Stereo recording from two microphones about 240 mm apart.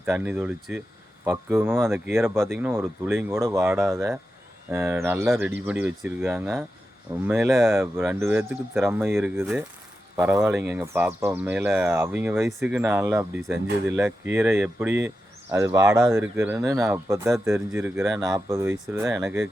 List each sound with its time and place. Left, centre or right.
0.0 s speech: centre